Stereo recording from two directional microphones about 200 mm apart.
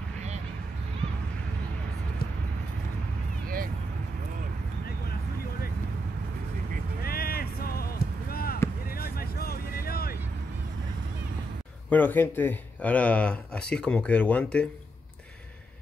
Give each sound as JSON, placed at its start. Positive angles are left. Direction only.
{"t": 7.0, "sound": "a sound", "side_deg": 50}
{"t": 8.8, "sound": "vehicle", "side_deg": 50}
{"t": 11.9, "sound": "speech", "side_deg": 10}